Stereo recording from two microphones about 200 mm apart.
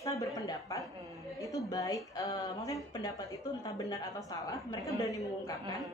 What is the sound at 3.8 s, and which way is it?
Speech, 15° left (ahead or behind).